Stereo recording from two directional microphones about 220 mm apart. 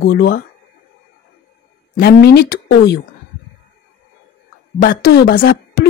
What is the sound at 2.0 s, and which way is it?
Speech, 45° left (ahead or behind).